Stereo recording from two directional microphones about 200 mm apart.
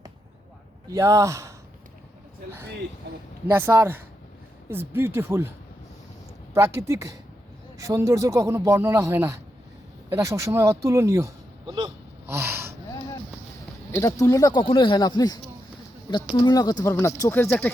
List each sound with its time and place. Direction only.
0.9 s speech: 15° right (ahead or behind)
3.4 s speech: 10° right (ahead or behind)
6.5 s speech: 15° right (ahead or behind)
11.6 s a sound: 25° right (ahead or behind)
12.3 s a sound: 10° right (ahead or behind)
13.9 s speech: 15° left (ahead or behind)